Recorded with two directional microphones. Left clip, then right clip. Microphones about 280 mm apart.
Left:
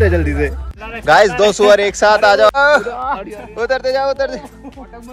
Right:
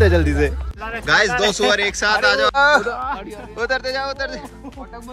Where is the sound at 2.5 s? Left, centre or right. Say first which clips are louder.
Left 3 dB; centre.